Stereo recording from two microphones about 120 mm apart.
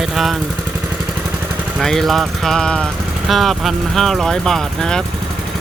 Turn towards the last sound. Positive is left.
turn(degrees=5)  # may be behind; listen again after turning